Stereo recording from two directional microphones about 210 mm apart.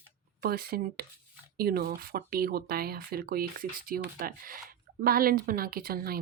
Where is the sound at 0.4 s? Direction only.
45° right (ahead or behind).